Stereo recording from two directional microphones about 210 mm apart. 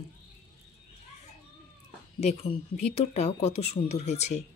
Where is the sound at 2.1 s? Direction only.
30° left (ahead or behind).